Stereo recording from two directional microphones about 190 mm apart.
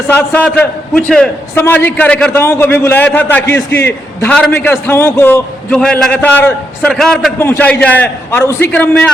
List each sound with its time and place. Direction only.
0.1 s a man's voice: 10° left (ahead or behind)
7.3 s a man's voice: 10° left (ahead or behind)